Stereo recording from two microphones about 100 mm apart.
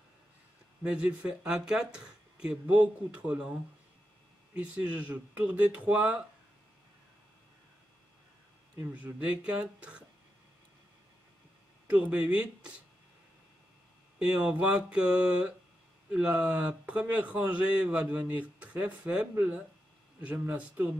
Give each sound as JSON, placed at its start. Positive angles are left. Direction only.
{"t": 0.8, "sound": "speech", "side_deg": -10}
{"t": 4.6, "sound": "speech", "side_deg": -15}
{"t": 8.9, "sound": "speech", "side_deg": -15}
{"t": 11.9, "sound": "speech", "side_deg": -15}
{"t": 14.2, "sound": "speech", "side_deg": -10}